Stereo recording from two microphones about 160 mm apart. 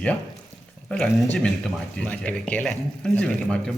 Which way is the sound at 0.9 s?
5° left (ahead or behind).